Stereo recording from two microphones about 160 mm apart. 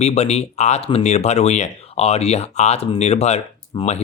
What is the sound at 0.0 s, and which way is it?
Speech, 45° left (ahead or behind).